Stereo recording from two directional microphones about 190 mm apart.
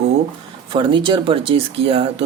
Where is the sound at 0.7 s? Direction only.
25° right (ahead or behind).